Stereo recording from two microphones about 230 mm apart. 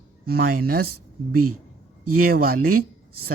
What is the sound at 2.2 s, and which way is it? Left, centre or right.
Speech, right.